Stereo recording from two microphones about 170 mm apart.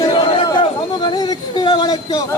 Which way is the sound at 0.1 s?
25° left (ahead or behind).